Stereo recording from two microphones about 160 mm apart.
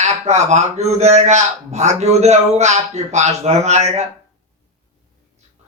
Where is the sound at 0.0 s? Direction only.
45° right (ahead or behind).